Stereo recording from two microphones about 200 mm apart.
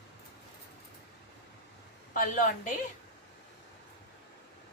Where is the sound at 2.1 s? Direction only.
45° left (ahead or behind).